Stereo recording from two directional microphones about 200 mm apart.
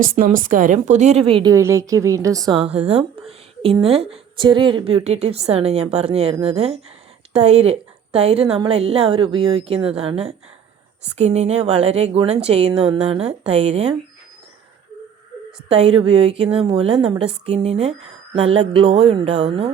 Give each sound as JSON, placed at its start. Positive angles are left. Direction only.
{"t": 0.2, "sound": "speech", "side_deg": -40}
{"t": 15.8, "sound": "speech", "side_deg": -30}